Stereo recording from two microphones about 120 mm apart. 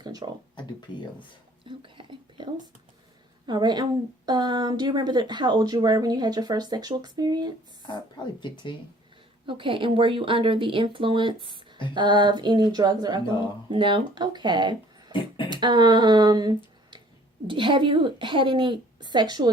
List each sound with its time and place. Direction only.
0.0 s a sound: 35° right (ahead or behind)
0.9 s speech: 40° left (ahead or behind)
1.6 s whispering: 45° right (ahead or behind)
3.4 s a woman's voice: 40° right (ahead or behind)
7.8 s speech: 40° left (ahead or behind)
9.5 s a woman's voice: 45° right (ahead or behind)